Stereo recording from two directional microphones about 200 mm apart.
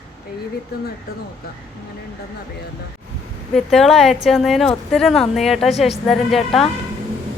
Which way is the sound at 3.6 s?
Centre (ahead or behind).